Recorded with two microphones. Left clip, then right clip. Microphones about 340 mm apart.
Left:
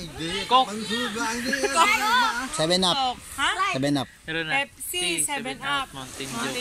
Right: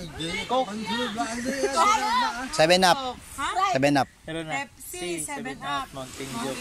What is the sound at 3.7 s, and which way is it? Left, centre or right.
Speech, right.